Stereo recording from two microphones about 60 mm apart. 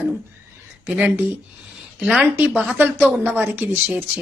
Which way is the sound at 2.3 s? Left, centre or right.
Right.